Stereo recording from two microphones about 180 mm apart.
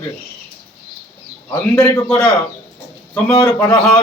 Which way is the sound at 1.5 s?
15° left (ahead or behind).